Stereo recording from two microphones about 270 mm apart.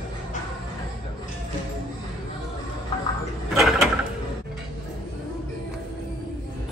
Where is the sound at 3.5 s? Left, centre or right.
Centre.